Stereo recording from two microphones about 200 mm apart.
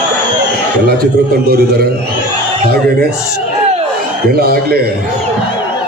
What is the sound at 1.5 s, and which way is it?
Speech, 50° right (ahead or behind).